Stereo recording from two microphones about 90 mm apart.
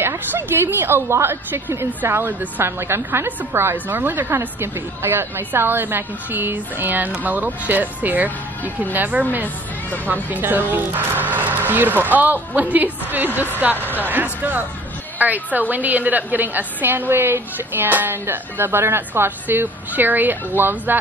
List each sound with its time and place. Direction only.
0.0 s a woman's voice: 25° right (ahead or behind)